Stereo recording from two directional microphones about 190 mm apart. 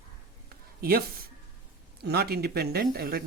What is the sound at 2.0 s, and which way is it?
Speech, 55° right (ahead or behind).